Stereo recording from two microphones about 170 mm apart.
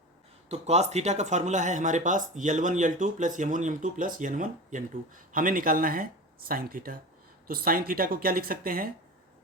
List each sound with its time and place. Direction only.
0.4 s speech: 40° right (ahead or behind); by 8.9 s 55° right (ahead or behind)